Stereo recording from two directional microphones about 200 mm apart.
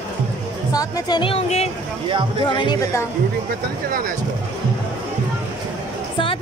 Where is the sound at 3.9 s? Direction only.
45° right (ahead or behind).